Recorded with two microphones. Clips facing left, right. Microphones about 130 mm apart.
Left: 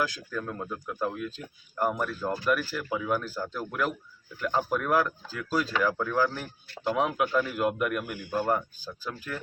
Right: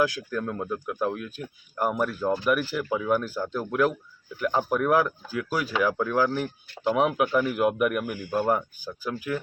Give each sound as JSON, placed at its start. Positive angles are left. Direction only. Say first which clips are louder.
{"t": 0.0, "sound": "speech", "louder": "right 5 dB", "side_deg": -10}